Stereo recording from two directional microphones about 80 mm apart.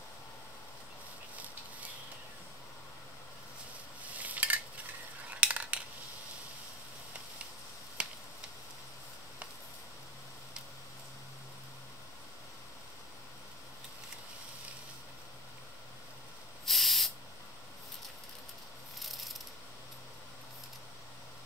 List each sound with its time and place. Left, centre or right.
4.0 s cutlery: centre
5.4 s a sound: centre
8.0 s finger snapping: centre
16.6 s spray: centre
18.9 s pulleys: centre